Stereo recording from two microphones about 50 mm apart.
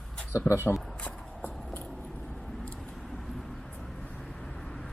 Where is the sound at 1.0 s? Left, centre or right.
Left.